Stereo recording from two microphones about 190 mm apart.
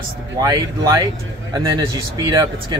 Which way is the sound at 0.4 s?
20° right (ahead or behind).